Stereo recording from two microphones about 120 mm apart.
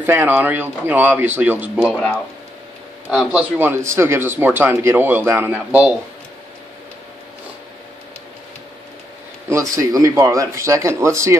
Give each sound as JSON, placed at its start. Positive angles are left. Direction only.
{"t": 0.0, "sound": "a man's voice", "side_deg": -15}
{"t": 1.8, "sound": "speech", "side_deg": 5}
{"t": 3.3, "sound": "speech", "side_deg": -15}
{"t": 9.5, "sound": "speech", "side_deg": -25}